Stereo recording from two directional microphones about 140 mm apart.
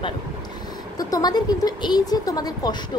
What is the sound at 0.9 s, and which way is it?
A woman's voice, 30° left (ahead or behind).